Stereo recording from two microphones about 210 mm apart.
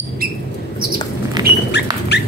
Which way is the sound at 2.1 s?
55° left (ahead or behind).